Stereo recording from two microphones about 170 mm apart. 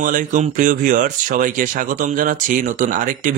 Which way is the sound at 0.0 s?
50° right (ahead or behind).